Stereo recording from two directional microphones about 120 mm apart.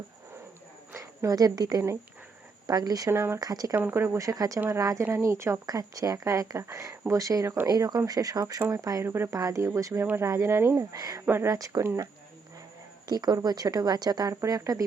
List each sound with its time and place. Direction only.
0.9 s speech: 30° right (ahead or behind)
3.1 s speech: 20° right (ahead or behind)
3.4 s speech: 30° right (ahead or behind)
3.8 s speech: 20° right (ahead or behind)
11.3 s speech: 20° right (ahead or behind)
11.5 s speech: 30° right (ahead or behind)
13.1 s speech: 35° right (ahead or behind)